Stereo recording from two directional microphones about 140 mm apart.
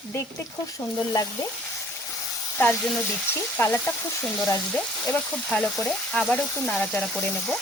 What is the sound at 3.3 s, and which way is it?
Frying, 15° left (ahead or behind).